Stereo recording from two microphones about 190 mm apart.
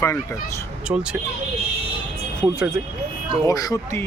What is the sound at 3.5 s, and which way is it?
Speech, 20° left (ahead or behind).